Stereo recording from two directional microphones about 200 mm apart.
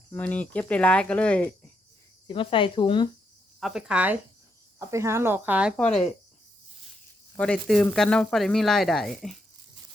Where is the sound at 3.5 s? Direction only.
Centre (ahead or behind).